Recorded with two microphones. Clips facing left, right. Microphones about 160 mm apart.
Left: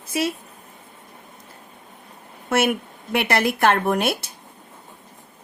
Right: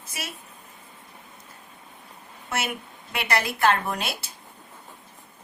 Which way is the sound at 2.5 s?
55° left (ahead or behind).